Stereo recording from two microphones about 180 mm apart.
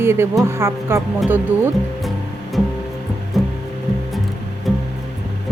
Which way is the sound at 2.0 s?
Centre (ahead or behind).